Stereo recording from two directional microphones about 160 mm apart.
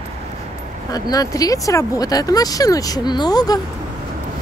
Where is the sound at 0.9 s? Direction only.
25° left (ahead or behind).